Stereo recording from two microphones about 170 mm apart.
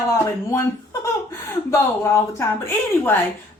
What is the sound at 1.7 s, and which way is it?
A woman's voice, 15° left (ahead or behind).